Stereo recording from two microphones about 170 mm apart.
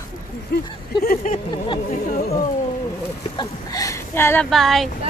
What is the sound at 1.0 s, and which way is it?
Speech, 55° left (ahead or behind).